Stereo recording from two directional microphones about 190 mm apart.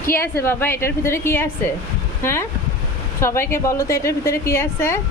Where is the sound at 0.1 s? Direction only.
10° left (ahead or behind).